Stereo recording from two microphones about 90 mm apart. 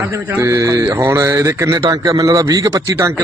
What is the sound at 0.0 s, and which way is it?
A man's voice, 30° right (ahead or behind).